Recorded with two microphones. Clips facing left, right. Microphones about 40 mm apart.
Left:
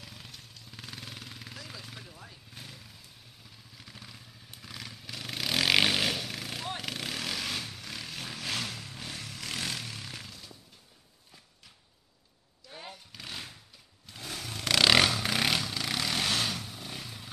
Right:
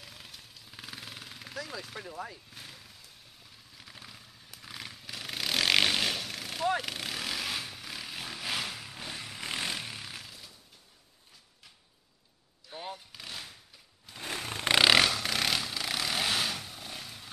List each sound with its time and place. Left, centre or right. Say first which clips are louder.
0.0 s jackhammer: left 1 dB; centre
2.5 s vehicle: even; centre
3.7 s motorcycle: even; centre
6.8 s vehicle: even; centre
10.0 s a sound: even; centre
13.1 s vehicle: left 1 dB; centre
14.2 s a sound: right 3 dB; right
15.0 s vehicle: left 1 dB; centre
15.6 s vehicle: left 1 dB; centre